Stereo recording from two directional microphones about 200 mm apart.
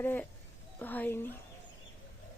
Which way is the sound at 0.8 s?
10° left (ahead or behind).